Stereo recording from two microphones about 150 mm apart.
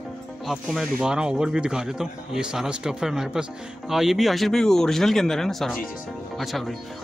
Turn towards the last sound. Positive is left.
turn(degrees=0)  # may be behind; listen again after turning